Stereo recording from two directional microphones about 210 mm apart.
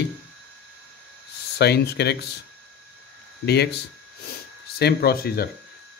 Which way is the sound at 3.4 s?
50° left (ahead or behind).